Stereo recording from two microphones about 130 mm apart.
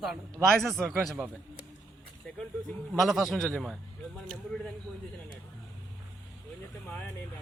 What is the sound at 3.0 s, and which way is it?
Speech, centre (ahead or behind).